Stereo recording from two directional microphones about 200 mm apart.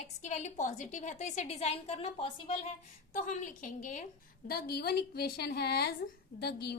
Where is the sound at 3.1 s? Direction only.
40° left (ahead or behind).